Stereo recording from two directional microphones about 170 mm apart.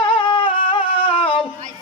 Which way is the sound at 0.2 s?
30° left (ahead or behind).